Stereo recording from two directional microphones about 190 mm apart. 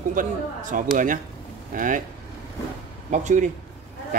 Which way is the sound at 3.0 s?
40° right (ahead or behind).